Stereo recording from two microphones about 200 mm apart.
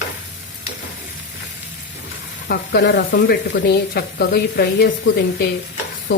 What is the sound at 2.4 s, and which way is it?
Speech, 55° left (ahead or behind).